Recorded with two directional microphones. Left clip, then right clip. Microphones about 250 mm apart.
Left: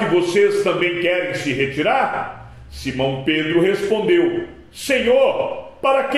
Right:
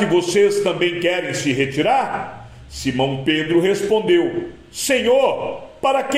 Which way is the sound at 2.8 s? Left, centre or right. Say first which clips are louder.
Right 1 dB; right.